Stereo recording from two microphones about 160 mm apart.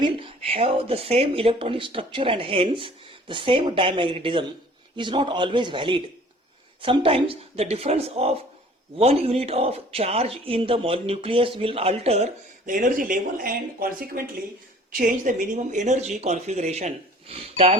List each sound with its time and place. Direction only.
0.0 s speech: 35° right (ahead or behind)